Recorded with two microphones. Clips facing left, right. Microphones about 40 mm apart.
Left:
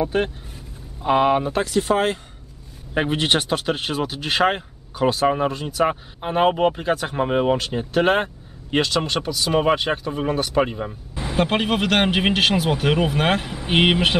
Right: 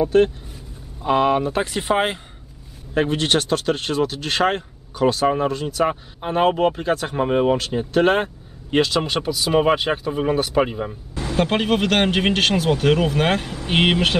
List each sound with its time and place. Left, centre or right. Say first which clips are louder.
0.0 s speech: right 6 dB; centre
1.8 s speech: left 2 dB; centre
2.9 s speech: right 1 dB; centre
11.1 s a sound: right 1 dB; centre
11.4 s speech: right 1 dB; centre